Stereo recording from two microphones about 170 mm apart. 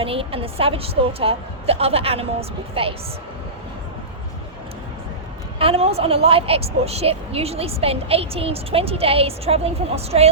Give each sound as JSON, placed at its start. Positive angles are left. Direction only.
{"t": 0.0, "sound": "a woman's voice", "side_deg": -35}
{"t": 5.5, "sound": "a woman's voice", "side_deg": -35}